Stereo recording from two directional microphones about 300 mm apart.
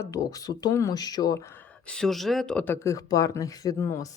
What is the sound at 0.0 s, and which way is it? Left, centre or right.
Speech, centre.